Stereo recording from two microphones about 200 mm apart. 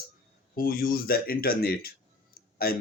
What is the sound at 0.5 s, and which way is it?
Speech, 45° left (ahead or behind).